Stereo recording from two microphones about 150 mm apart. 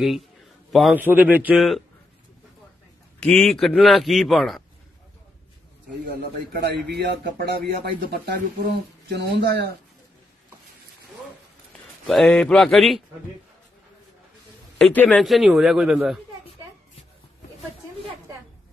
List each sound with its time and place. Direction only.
0.7 s a man's voice: centre (ahead or behind)
0.9 s a man's voice: 10° right (ahead or behind)
3.2 s a man's voice: 5° left (ahead or behind)
6.6 s speech: 90° right
12.1 s a man's voice: centre (ahead or behind)
14.8 s a man's voice: 10° left (ahead or behind)